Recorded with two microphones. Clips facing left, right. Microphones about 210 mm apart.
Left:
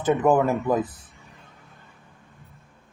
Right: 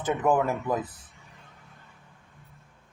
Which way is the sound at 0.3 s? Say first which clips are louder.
Left 3 dB; 40° left (ahead or behind).